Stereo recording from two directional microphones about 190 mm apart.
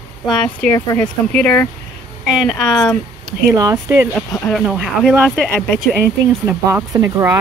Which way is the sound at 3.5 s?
20° right (ahead or behind).